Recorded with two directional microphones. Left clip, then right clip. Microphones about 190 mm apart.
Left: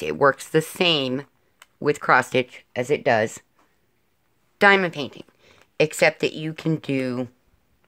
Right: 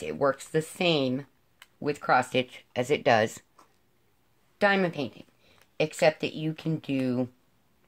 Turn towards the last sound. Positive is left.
turn(degrees=55)  # may be behind; listen again after turning